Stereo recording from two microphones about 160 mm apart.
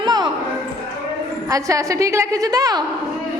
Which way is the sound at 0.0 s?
25° right (ahead or behind).